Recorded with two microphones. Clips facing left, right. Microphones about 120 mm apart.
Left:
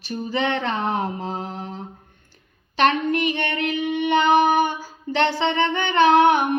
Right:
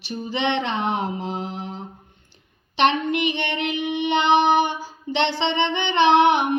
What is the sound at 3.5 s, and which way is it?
Child singing, 20° right (ahead or behind).